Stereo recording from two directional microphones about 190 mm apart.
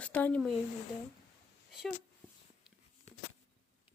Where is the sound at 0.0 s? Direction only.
10° left (ahead or behind).